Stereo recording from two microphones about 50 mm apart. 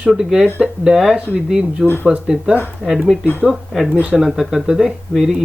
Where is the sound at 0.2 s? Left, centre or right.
Centre.